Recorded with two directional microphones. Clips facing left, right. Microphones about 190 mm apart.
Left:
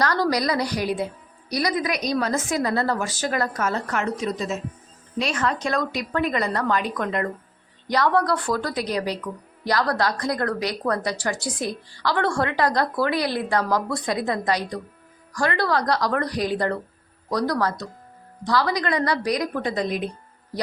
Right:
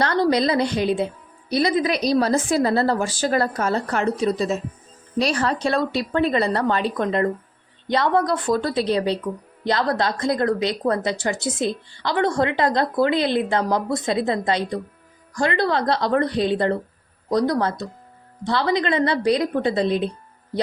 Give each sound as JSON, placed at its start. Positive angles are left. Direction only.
{"t": 0.0, "sound": "a woman's voice", "side_deg": -25}